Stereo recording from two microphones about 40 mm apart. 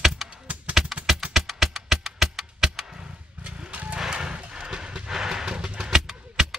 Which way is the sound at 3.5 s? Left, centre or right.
Right.